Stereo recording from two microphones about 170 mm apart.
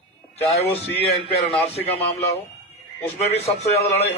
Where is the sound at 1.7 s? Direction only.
35° left (ahead or behind).